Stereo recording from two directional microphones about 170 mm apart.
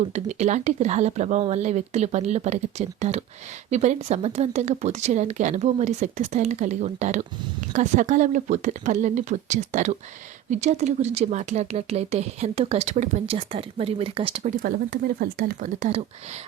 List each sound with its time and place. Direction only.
0.1 s speech: 40° right (ahead or behind)
14.5 s speech: 60° right (ahead or behind)